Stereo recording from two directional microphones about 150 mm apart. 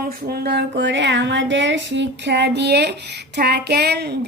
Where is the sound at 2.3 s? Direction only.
90° right.